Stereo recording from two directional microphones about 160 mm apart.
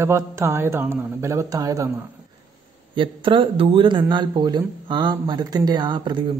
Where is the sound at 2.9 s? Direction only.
30° right (ahead or behind).